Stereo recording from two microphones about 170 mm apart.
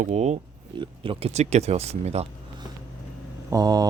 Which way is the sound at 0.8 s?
30° right (ahead or behind).